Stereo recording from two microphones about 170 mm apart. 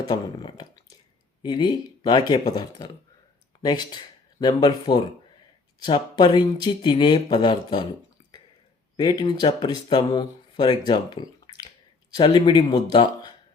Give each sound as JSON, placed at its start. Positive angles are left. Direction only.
{"t": 0.1, "sound": "speech", "side_deg": 25}
{"t": 8.2, "sound": "a sound", "side_deg": 25}
{"t": 9.0, "sound": "speech", "side_deg": 25}